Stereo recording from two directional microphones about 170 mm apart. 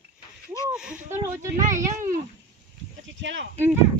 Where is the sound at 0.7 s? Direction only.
5° right (ahead or behind).